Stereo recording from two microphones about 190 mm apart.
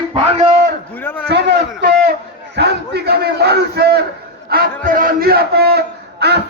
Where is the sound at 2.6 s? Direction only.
60° right (ahead or behind).